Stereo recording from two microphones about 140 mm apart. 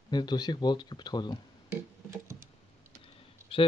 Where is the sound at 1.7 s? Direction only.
20° right (ahead or behind).